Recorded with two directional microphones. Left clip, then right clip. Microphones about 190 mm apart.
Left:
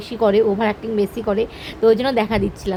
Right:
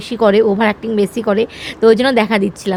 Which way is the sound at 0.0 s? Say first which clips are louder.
Right 4 dB; 30° right (ahead or behind).